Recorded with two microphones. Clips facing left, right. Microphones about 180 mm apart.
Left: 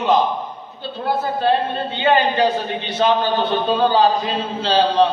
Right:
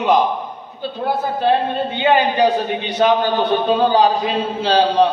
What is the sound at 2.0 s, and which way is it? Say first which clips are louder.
A man's voice: right 1 dB; 15° right (ahead or behind).